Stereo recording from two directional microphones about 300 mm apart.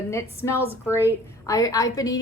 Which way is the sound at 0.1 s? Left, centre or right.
Centre.